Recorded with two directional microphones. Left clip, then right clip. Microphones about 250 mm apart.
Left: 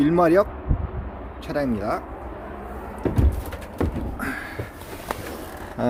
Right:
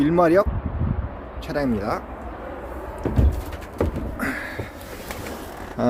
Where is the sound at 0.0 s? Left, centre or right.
Centre.